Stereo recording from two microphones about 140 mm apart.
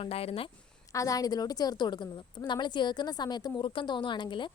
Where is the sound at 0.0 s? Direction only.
45° left (ahead or behind).